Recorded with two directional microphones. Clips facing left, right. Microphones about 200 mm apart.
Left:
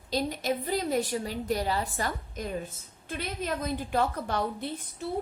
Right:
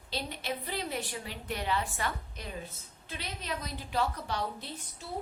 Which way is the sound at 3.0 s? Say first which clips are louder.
Left 7 dB; 50° left (ahead or behind).